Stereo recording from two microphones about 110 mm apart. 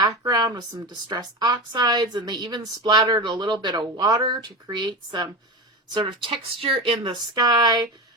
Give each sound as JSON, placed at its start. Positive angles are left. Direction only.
{"t": 0.0, "sound": "speech", "side_deg": -35}
{"t": 7.1, "sound": "speech", "side_deg": -35}